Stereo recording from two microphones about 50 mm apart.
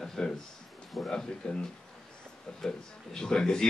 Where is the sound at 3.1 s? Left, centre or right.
Centre.